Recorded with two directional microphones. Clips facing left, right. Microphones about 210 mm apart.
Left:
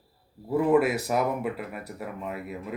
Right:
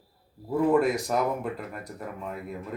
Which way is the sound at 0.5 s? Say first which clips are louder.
Left 1 dB; 5° left (ahead or behind).